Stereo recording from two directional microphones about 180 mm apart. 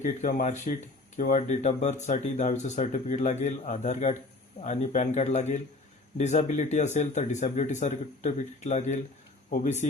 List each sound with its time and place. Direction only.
0.0 s speech: 45° left (ahead or behind)